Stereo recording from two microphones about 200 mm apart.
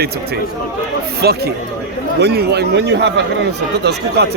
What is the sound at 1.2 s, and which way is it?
Speech, 50° right (ahead or behind).